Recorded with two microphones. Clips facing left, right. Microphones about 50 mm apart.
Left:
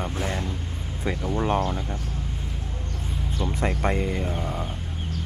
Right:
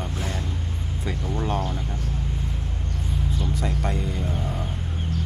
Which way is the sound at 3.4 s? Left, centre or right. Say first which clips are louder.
Left 5 dB; left.